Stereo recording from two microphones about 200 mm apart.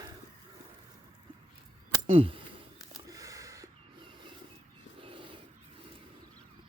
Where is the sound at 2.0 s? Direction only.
30° right (ahead or behind).